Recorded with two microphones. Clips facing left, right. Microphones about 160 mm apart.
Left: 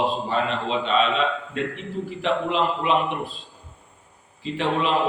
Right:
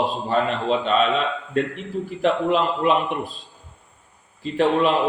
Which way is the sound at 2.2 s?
45° right (ahead or behind).